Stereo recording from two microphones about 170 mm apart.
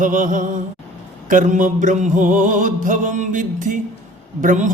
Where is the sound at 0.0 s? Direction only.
50° right (ahead or behind).